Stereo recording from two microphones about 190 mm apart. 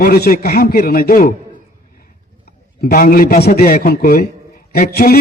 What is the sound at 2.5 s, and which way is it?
A man's voice, 50° left (ahead or behind).